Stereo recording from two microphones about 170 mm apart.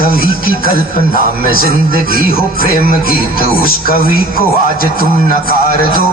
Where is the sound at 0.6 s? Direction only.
60° left (ahead or behind).